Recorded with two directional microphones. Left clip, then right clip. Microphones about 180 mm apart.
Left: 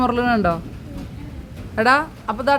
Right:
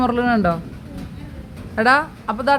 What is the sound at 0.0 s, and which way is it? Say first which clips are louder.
Speech: even; centre (ahead or behind).